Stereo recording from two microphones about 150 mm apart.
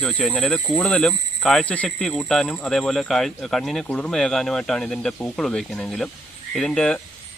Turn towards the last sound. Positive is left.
turn(degrees=5)  # may be behind; listen again after turning